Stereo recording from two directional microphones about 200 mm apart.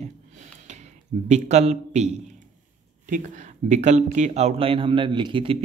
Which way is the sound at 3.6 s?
35° right (ahead or behind).